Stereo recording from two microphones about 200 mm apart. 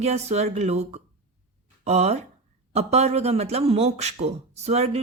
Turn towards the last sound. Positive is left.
turn(degrees=-35)  # may be behind; listen again after turning